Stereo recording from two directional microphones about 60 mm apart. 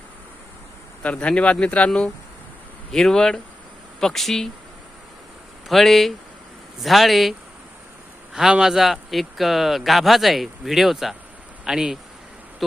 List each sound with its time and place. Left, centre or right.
1.0 s speech: centre
2.9 s speech: centre
5.6 s speech: centre